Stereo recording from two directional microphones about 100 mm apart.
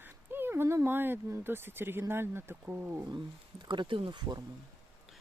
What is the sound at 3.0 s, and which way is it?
Speech, 45° right (ahead or behind).